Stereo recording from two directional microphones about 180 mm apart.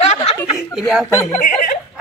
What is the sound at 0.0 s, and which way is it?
Chuckle, 35° left (ahead or behind).